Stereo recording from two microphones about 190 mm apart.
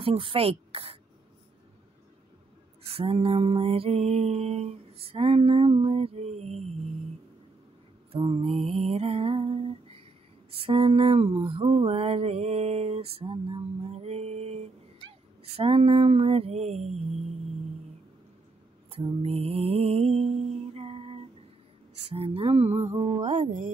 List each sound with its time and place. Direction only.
0.0 s a woman's voice: 30° right (ahead or behind)
2.9 s mantra: 30° right (ahead or behind)
8.1 s mantra: 30° right (ahead or behind)
18.9 s mantra: 30° right (ahead or behind)